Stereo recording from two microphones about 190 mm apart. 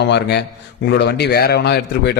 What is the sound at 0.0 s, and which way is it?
A man's voice, 60° left (ahead or behind).